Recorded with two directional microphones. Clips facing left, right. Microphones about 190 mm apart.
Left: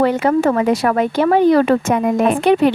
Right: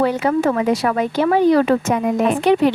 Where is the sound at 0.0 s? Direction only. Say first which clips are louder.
Left 2 dB; 55° left (ahead or behind).